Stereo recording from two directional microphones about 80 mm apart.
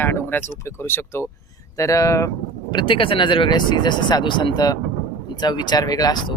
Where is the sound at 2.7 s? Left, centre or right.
Left.